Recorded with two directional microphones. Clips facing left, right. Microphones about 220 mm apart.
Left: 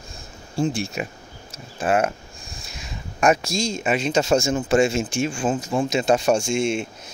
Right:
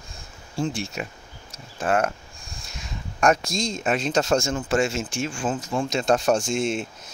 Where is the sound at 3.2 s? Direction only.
5° left (ahead or behind).